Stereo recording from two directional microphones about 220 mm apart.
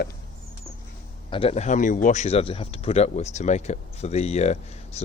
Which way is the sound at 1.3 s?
25° left (ahead or behind).